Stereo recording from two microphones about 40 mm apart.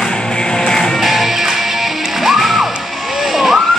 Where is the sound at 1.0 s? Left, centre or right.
Centre.